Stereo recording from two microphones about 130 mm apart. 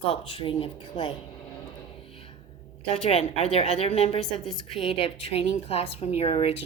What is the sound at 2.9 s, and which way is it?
A woman's voice, 50° left (ahead or behind).